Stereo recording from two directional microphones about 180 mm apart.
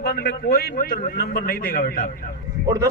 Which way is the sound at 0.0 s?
55° left (ahead or behind).